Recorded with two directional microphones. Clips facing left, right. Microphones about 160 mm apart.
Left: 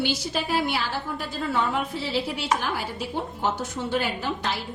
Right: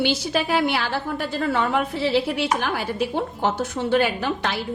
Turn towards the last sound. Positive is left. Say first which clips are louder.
# right 3 dB
turn(degrees=-70)  # may be behind; listen again after turning